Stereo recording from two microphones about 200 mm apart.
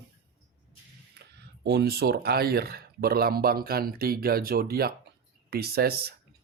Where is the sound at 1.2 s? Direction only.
55° right (ahead or behind).